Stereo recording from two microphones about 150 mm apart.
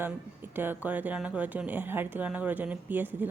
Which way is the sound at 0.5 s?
15° right (ahead or behind).